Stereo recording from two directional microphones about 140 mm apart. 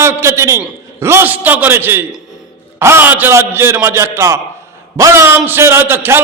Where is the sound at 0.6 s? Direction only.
20° right (ahead or behind).